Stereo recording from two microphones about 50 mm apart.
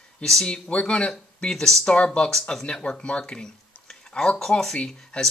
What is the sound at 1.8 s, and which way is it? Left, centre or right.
Speech, left.